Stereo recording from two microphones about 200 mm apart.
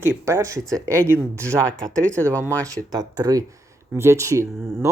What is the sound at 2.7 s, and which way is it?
Speech, 20° right (ahead or behind).